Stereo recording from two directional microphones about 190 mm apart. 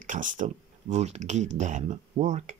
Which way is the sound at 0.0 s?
40° right (ahead or behind).